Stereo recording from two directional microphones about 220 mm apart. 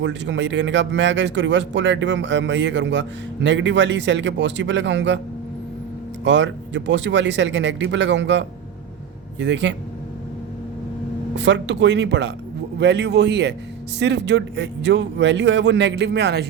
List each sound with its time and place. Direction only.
0.0 s speech: 55° right (ahead or behind)
6.2 s a man's voice: 55° right (ahead or behind)
11.3 s a man's voice: 55° right (ahead or behind)